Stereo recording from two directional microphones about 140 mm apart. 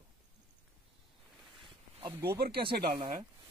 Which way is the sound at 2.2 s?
90° right.